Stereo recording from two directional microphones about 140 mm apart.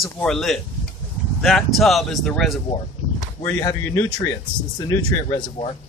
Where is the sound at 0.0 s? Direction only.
5° left (ahead or behind).